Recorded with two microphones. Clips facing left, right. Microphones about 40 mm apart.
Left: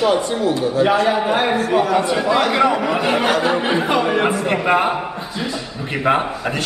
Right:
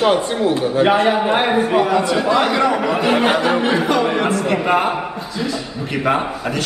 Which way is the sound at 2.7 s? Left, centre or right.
Centre.